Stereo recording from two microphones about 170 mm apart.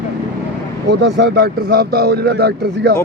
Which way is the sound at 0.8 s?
85° right.